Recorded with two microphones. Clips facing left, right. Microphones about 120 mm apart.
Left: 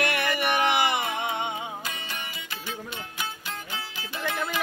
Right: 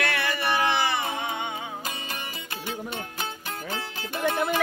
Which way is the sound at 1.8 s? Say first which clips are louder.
Right 1 dB; 40° right (ahead or behind).